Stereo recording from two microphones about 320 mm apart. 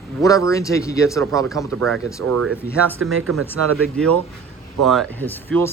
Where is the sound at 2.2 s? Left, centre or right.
Right.